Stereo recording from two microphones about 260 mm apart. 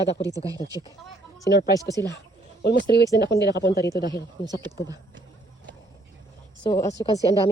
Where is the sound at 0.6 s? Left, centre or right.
Left.